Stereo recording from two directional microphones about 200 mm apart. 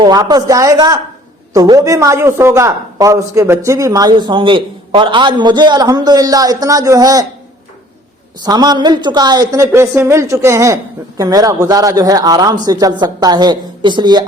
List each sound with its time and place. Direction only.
0.0 s a man's voice: 20° right (ahead or behind)
8.4 s a man's voice: 20° right (ahead or behind)